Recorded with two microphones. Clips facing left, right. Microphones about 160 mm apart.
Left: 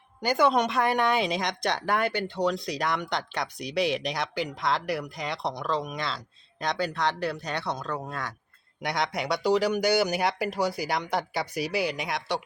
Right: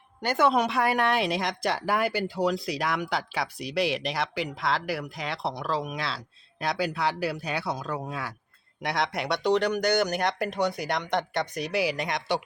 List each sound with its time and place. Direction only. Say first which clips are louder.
0.2 s speech: even; centre (ahead or behind)